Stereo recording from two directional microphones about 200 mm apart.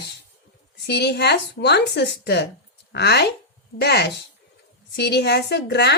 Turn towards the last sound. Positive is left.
turn(degrees=55)  # may be behind; listen again after turning